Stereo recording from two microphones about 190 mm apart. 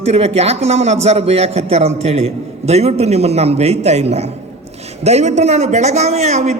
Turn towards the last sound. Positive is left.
turn(degrees=-35)  # may be behind; listen again after turning